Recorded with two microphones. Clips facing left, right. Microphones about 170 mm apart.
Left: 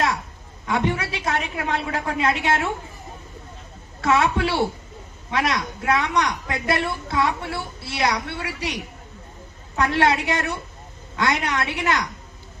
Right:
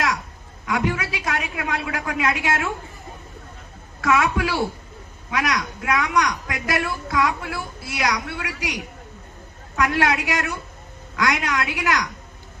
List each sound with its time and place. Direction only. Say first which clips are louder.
0.6 s a woman's voice: left 1 dB; 30° left (ahead or behind)
4.0 s a woman's voice: left 1 dB; 30° left (ahead or behind)